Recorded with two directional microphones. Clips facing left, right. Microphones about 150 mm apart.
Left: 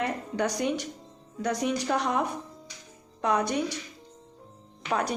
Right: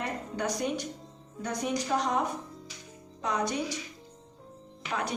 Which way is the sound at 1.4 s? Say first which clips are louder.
Left 5 dB; 90° left.